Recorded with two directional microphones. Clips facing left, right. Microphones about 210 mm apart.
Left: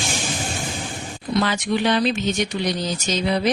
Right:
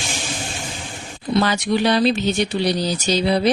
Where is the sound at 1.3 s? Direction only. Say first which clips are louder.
Right 3 dB; 35° right (ahead or behind).